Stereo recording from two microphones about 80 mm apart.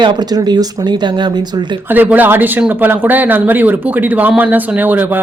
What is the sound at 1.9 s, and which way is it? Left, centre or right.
Speech, right.